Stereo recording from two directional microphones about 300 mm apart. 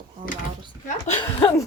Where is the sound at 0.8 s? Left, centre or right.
Centre.